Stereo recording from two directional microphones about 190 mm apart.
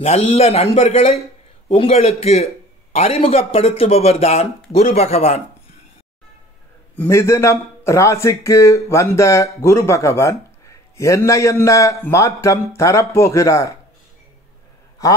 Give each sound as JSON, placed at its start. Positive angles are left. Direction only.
{"t": 0.0, "sound": "speech", "side_deg": 35}
{"t": 7.0, "sound": "a man's voice", "side_deg": 15}